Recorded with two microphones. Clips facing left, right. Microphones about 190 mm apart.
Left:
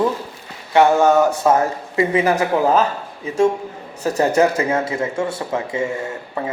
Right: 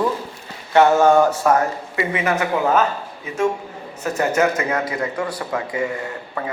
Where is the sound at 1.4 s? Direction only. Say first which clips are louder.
Left 1 dB; 25° left (ahead or behind).